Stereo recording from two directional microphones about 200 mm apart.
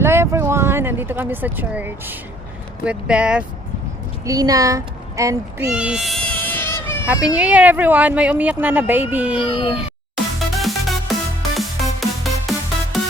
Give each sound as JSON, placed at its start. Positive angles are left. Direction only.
{"t": 0.0, "sound": "a sound", "side_deg": -10}
{"t": 2.8, "sound": "speech", "side_deg": -5}
{"t": 4.3, "sound": "speech", "side_deg": -15}
{"t": 5.7, "sound": "baby cry", "side_deg": -5}
{"t": 7.3, "sound": "speech", "side_deg": -5}
{"t": 9.4, "sound": "speech", "side_deg": 25}
{"t": 10.5, "sound": "music", "side_deg": 0}